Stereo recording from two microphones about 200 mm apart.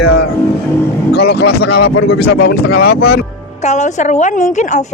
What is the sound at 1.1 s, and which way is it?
Speech, 55° left (ahead or behind).